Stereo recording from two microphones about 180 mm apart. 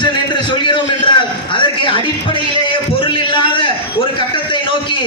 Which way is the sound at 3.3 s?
25° left (ahead or behind).